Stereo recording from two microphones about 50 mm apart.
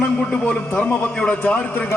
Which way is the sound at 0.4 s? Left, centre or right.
Left.